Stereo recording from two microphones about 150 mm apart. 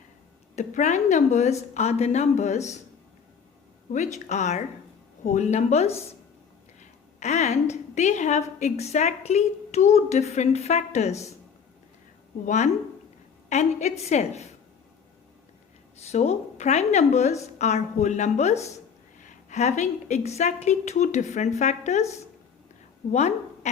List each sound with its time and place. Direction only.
0.5 s a woman's voice: 55° left (ahead or behind)
3.9 s a woman's voice: 50° left (ahead or behind)
7.2 s a woman's voice: 50° left (ahead or behind)
12.5 s a woman's voice: 50° left (ahead or behind)
16.0 s a woman's voice: 45° left (ahead or behind)